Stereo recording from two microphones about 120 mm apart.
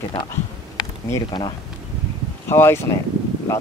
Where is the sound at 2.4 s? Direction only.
20° left (ahead or behind).